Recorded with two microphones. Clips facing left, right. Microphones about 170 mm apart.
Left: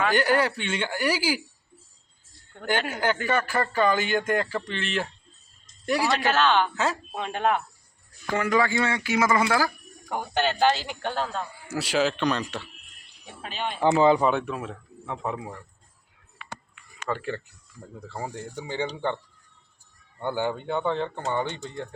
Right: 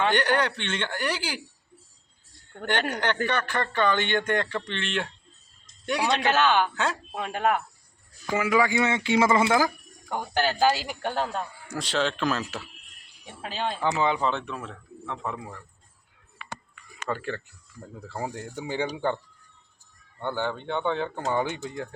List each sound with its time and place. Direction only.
0.1 s speech: 5° left (ahead or behind)
2.6 s a man's voice: 5° left (ahead or behind)
6.2 s speech: 15° right (ahead or behind)
6.7 s speech: centre (ahead or behind); by 9.7 s 20° right (ahead or behind)
10.1 s speech: 5° left (ahead or behind); by 11.4 s 15° right (ahead or behind)
11.7 s speech: 5° left (ahead or behind)
13.4 s speech: 25° right (ahead or behind)
14.2 s speech: 10° left (ahead or behind)
17.1 s speech: centre (ahead or behind)
20.1 s speech: 10° left (ahead or behind); by 21.8 s 10° right (ahead or behind)